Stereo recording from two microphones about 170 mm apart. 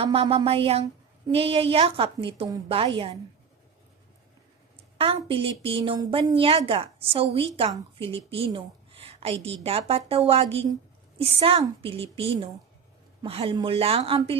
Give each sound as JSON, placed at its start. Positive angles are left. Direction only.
{"t": 0.0, "sound": "a woman's voice", "side_deg": -35}
{"t": 4.9, "sound": "a woman's voice", "side_deg": -30}